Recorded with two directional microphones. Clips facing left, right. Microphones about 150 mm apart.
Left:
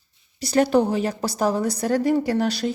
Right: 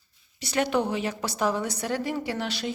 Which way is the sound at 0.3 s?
35° left (ahead or behind).